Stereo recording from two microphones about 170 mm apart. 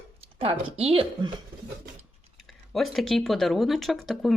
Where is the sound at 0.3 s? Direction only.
35° right (ahead or behind).